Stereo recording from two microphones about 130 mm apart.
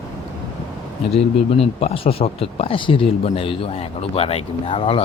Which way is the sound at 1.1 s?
50° left (ahead or behind).